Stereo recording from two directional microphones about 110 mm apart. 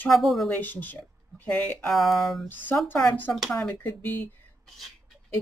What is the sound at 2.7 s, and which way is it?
Speech, 15° left (ahead or behind).